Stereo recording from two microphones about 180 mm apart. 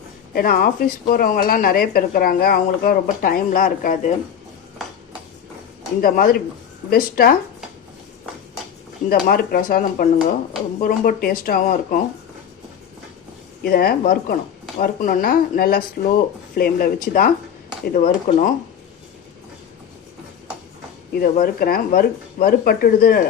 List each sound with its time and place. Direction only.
0.3 s a woman's voice: 55° left (ahead or behind)
6.0 s a woman's voice: 55° left (ahead or behind)
9.0 s a woman's voice: 55° left (ahead or behind)
13.6 s a woman's voice: 55° left (ahead or behind)
21.2 s speech: 55° left (ahead or behind)